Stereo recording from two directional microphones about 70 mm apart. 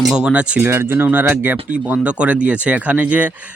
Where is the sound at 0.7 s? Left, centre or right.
Right.